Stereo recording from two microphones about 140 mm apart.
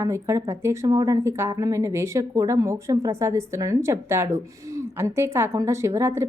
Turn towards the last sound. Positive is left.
turn(degrees=-20)  # may be behind; listen again after turning